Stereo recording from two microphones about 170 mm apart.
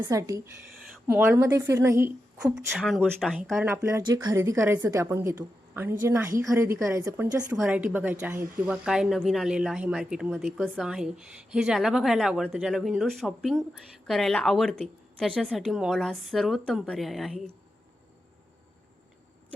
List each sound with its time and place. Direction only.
0.0 s speech: 20° right (ahead or behind)
2.7 s speech: centre (ahead or behind)
3.7 s speech: 15° right (ahead or behind)
7.6 s speech: 5° right (ahead or behind)